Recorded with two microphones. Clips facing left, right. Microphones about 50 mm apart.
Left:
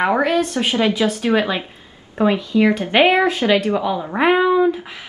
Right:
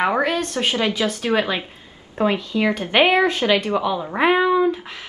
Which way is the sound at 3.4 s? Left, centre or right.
Left.